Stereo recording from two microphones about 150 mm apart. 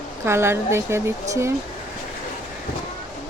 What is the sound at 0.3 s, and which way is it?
Speech, 15° right (ahead or behind).